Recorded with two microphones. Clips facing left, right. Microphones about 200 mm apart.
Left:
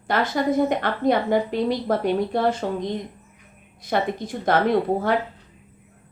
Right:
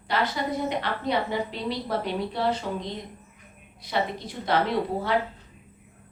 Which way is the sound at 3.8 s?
50° left (ahead or behind).